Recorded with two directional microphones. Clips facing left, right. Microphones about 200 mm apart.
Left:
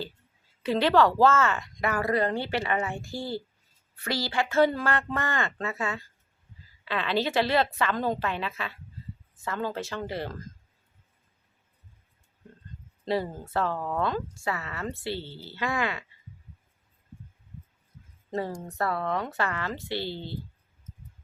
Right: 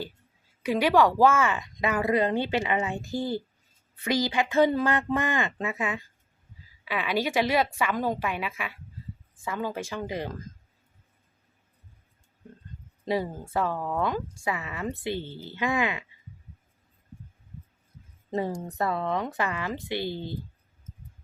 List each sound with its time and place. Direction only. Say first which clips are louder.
0.6 s speech: even; 10° right (ahead or behind)
13.1 s speech: even; 15° right (ahead or behind)
18.3 s speech: right 2 dB; 20° right (ahead or behind)